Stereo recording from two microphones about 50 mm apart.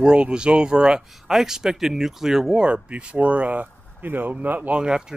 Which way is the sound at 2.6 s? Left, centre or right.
Right.